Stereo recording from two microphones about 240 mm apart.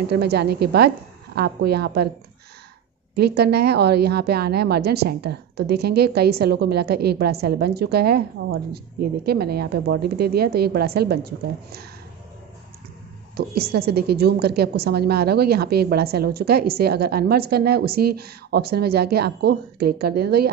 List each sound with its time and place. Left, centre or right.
0.1 s a woman's voice: right
3.2 s a woman's voice: right
13.6 s a woman's voice: right